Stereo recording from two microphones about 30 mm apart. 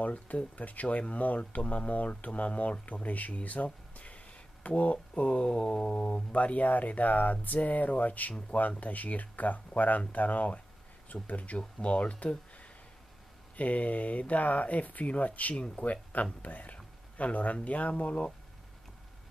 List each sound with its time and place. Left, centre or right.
0.0 s speech: left
3.4 s a sound: left
5.1 s speech: left
11.5 s speech: left